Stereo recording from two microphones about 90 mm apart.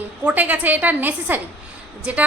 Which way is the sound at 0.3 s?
20° right (ahead or behind).